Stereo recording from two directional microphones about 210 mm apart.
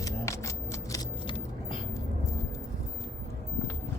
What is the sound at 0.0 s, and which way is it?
Shuffling cards, 15° left (ahead or behind).